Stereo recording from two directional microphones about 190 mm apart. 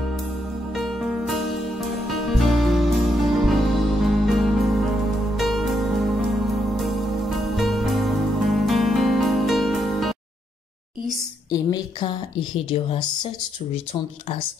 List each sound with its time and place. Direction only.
0.7 s music: centre (ahead or behind)
11.5 s a woman's voice: 20° left (ahead or behind)